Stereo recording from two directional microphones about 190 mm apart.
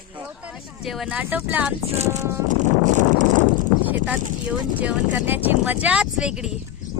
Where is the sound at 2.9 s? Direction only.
40° right (ahead or behind).